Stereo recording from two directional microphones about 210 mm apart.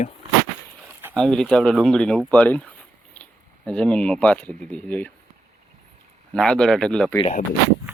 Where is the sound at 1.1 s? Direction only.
5° left (ahead or behind).